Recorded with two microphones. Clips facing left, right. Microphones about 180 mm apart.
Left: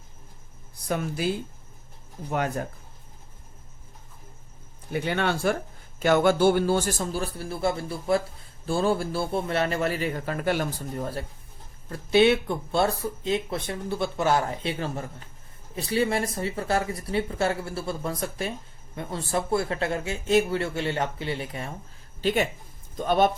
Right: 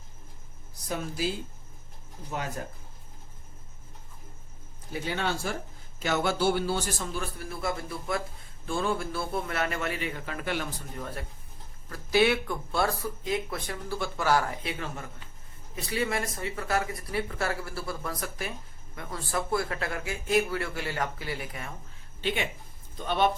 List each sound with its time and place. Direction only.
0.9 s speech: 55° left (ahead or behind)
2.3 s speech: 60° left (ahead or behind)
4.9 s a man's voice: 60° left (ahead or behind); by 21.7 s 25° left (ahead or behind)
22.2 s speech: 40° left (ahead or behind)